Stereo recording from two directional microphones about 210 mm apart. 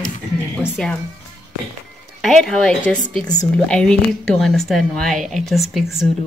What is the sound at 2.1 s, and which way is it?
A woman's voice, centre (ahead or behind).